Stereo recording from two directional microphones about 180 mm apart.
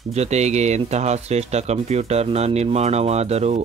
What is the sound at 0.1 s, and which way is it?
Speech, 40° right (ahead or behind).